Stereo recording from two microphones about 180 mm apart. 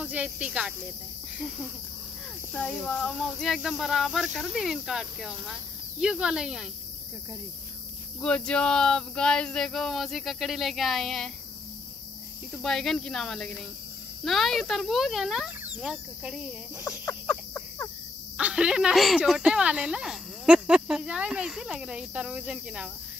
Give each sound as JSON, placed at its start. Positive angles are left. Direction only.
{"t": 0.0, "sound": "speech", "side_deg": -5}
{"t": 2.5, "sound": "speech", "side_deg": 5}
{"t": 8.2, "sound": "speech", "side_deg": 5}
{"t": 12.6, "sound": "speech", "side_deg": 0}
{"t": 17.0, "sound": "a sound", "side_deg": 20}
{"t": 18.4, "sound": "speech", "side_deg": -5}